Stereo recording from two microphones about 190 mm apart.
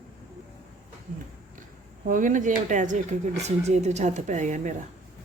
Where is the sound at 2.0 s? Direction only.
45° right (ahead or behind).